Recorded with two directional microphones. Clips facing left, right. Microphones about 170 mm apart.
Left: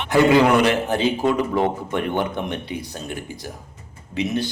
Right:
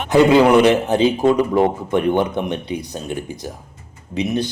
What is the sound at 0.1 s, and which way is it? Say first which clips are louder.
Speech: right 4 dB; 20° right (ahead or behind).